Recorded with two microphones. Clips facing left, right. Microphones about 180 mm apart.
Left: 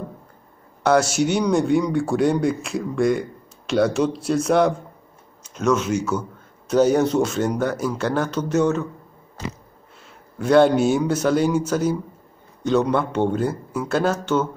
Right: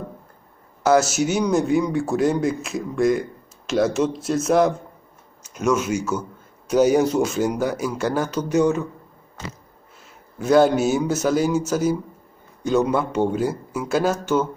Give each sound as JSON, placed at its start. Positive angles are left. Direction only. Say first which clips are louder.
{"t": 0.8, "sound": "a man's voice", "louder": "even", "side_deg": -5}
{"t": 10.4, "sound": "a man's voice", "louder": "left 1 dB", "side_deg": -5}